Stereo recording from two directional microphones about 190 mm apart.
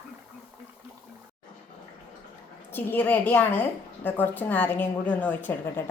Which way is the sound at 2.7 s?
10° left (ahead or behind).